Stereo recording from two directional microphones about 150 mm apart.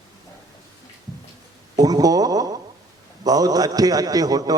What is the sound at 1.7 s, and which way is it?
A man's voice, 25° right (ahead or behind).